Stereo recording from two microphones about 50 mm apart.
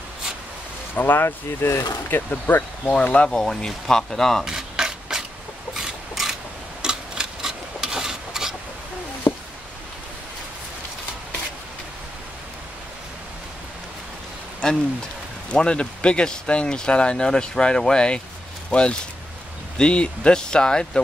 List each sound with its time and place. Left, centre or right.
0.9 s speech: left
1.2 s speech: left
2.3 s speech: left
3.3 s speech: centre
4.5 s a sound: centre
15.5 s speech: centre